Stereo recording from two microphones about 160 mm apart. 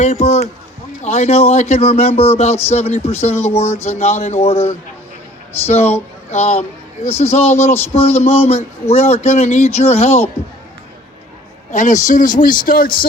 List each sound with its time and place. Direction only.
0.0 s speech: 45° left (ahead or behind)
11.7 s speech: 50° left (ahead or behind)